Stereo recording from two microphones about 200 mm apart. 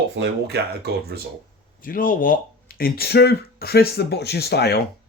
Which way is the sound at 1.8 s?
45° left (ahead or behind).